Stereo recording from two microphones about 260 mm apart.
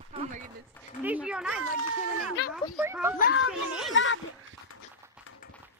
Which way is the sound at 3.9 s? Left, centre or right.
Left.